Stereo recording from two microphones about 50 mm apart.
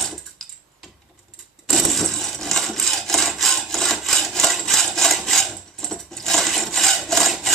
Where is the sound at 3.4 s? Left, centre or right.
Centre.